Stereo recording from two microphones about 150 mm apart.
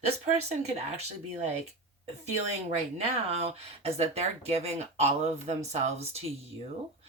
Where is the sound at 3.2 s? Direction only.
40° right (ahead or behind).